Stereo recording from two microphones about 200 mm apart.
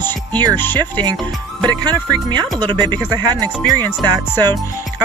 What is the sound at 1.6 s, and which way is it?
Speech, 20° right (ahead or behind).